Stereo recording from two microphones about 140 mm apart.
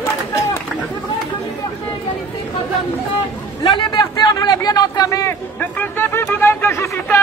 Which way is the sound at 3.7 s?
35° left (ahead or behind).